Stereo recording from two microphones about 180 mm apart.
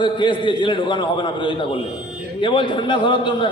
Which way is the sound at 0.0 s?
25° left (ahead or behind).